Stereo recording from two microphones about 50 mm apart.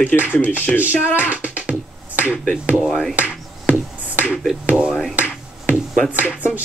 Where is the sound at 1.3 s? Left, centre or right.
Right.